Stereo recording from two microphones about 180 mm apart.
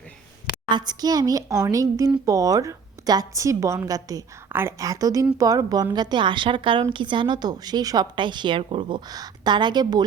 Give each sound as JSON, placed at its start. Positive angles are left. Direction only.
{"t": 0.7, "sound": "a woman's voice", "side_deg": -25}